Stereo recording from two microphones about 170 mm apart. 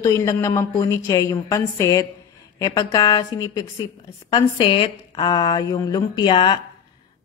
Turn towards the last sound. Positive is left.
turn(degrees=25)  # may be behind; listen again after turning